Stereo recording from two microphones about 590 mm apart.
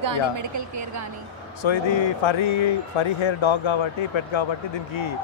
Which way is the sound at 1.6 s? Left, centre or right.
Left.